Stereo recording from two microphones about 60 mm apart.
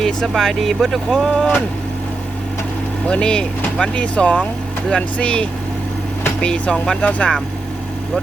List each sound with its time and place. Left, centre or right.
0.0 s speech: centre
3.1 s speech: centre